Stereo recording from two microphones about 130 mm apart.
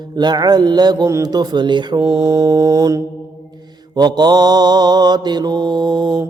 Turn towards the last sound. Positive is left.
turn(degrees=-35)  # may be behind; listen again after turning